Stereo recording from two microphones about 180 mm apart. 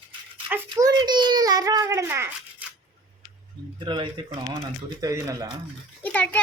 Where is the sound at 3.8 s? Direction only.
25° right (ahead or behind).